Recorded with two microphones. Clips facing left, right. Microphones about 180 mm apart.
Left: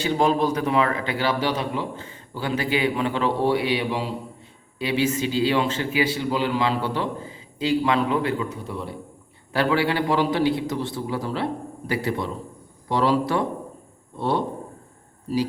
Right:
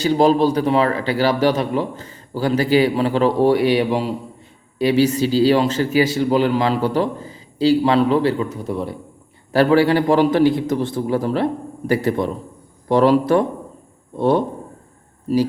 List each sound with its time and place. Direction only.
0.0 s a man's voice: 35° right (ahead or behind)